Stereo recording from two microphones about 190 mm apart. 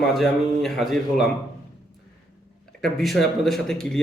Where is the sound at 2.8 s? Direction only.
Centre (ahead or behind).